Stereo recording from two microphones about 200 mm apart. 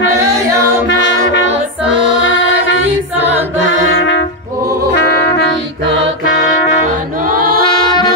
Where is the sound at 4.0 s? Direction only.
65° left (ahead or behind).